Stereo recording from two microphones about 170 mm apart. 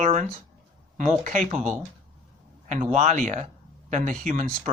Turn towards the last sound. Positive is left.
turn(degrees=-45)  # may be behind; listen again after turning